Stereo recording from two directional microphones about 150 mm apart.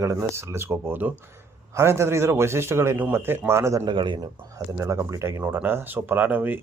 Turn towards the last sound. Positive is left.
turn(degrees=-10)  # may be behind; listen again after turning